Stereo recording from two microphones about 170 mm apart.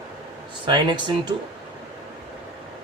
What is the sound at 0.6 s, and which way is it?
Speech, 25° right (ahead or behind).